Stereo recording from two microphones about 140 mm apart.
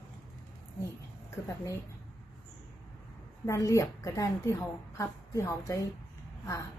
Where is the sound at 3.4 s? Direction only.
20° left (ahead or behind).